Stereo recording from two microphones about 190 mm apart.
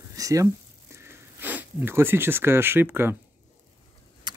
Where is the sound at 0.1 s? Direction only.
15° right (ahead or behind).